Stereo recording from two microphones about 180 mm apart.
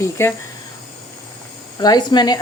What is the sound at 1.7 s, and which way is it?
Speech, 20° left (ahead or behind).